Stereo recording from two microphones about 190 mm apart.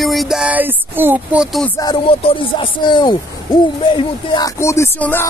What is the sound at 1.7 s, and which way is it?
Hoot, 25° left (ahead or behind).